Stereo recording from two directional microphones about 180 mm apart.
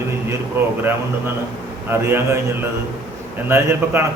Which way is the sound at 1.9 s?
15° right (ahead or behind).